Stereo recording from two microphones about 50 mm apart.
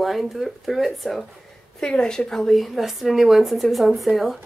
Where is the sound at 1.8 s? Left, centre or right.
Centre.